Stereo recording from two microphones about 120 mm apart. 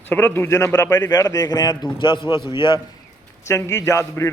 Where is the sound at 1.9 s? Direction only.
45° left (ahead or behind).